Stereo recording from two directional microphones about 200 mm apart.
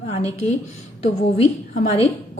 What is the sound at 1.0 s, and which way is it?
A woman's voice, 35° left (ahead or behind).